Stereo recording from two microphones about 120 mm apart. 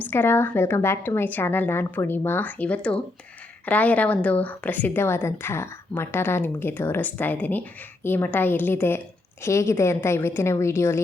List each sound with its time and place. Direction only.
0.0 s a woman's voice: 20° left (ahead or behind)